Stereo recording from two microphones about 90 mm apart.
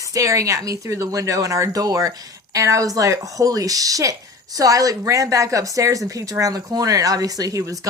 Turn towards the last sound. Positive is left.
turn(degrees=-35)  # may be behind; listen again after turning